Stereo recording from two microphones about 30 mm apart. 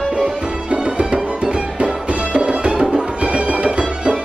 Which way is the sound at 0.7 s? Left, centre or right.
Right.